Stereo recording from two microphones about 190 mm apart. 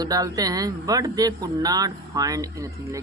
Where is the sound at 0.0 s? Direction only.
20° right (ahead or behind).